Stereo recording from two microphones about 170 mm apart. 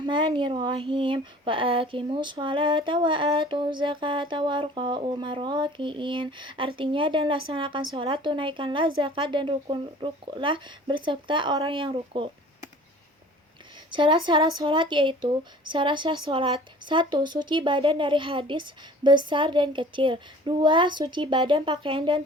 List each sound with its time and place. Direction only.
0.0 s a woman's voice: 30° right (ahead or behind)
13.9 s speech: 30° right (ahead or behind)